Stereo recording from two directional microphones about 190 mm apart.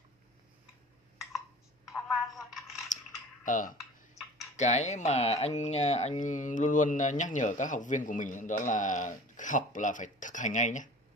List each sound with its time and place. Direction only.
1.9 s telephone: centre (ahead or behind)
2.9 s a sound: 40° left (ahead or behind)
3.4 s speech: 45° left (ahead or behind)